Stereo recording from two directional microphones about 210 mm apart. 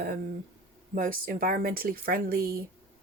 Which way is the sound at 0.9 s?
40° right (ahead or behind).